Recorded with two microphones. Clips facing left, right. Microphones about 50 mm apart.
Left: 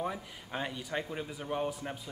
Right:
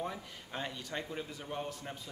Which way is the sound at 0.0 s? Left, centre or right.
Centre.